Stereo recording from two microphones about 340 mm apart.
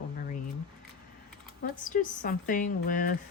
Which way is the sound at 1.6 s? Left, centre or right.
Left.